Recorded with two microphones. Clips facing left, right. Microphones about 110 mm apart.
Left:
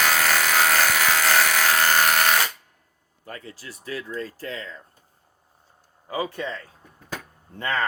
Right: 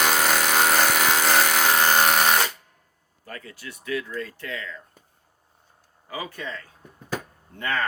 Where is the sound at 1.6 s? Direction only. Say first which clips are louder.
Right 1 dB; 20° right (ahead or behind).